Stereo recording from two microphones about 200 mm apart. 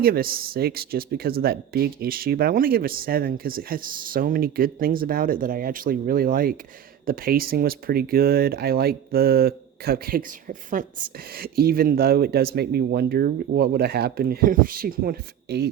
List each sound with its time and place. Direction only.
0.0 s speech: 45° right (ahead or behind)